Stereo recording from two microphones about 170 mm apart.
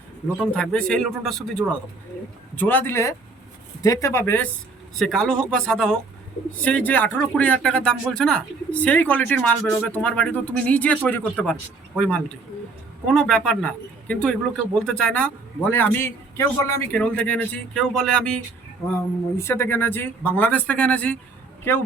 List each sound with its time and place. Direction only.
0.3 s a man's voice: 5° left (ahead or behind)